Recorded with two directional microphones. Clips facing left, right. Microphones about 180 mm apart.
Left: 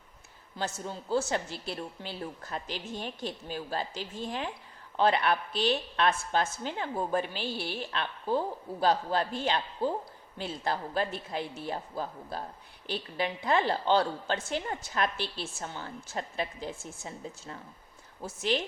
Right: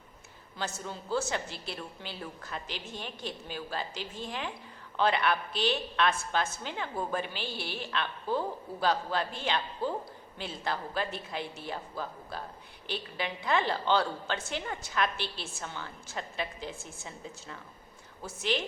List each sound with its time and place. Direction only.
0.5 s a woman's voice: 40° left (ahead or behind)